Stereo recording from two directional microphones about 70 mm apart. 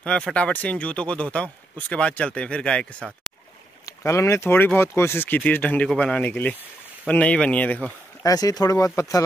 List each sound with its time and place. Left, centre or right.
0.0 s speech: centre
4.0 s speech: left
8.2 s speech: left
8.7 s speech: left